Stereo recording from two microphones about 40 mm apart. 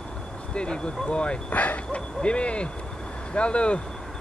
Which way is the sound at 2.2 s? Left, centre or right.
Left.